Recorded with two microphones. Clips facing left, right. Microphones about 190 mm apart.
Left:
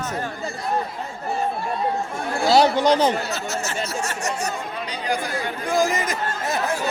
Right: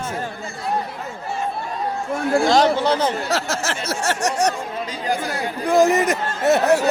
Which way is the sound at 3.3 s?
90° right.